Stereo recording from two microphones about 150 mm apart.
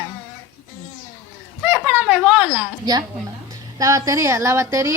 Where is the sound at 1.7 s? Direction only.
5° right (ahead or behind).